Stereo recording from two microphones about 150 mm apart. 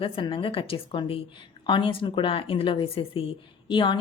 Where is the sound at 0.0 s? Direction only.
35° left (ahead or behind).